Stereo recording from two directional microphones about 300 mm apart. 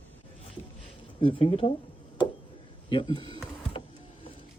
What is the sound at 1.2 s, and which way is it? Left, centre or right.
Speech, centre.